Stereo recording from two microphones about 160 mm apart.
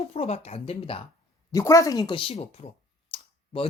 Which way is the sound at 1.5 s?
20° left (ahead or behind).